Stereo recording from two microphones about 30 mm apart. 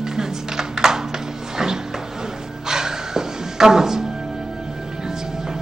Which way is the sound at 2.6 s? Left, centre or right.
Centre.